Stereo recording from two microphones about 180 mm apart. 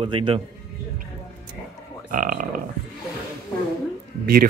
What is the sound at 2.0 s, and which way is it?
Speech, 50° right (ahead or behind).